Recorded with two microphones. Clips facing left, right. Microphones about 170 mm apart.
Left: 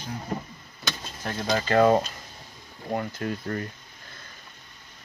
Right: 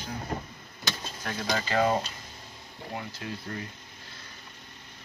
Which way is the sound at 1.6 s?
55° left (ahead or behind).